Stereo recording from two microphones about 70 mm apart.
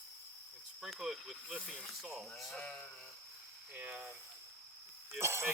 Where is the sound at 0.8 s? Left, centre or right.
Centre.